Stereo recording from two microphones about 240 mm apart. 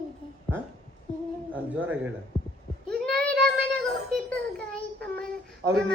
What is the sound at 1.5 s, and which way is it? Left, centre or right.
Speech, centre.